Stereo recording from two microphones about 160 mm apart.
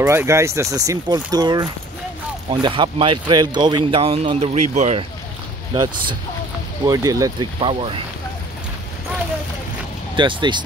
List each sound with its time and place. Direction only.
0.0 s speech: 15° right (ahead or behind); by 5.0 s 45° right (ahead or behind)
6.9 s speech: 20° right (ahead or behind)
10.1 s speech: 30° right (ahead or behind)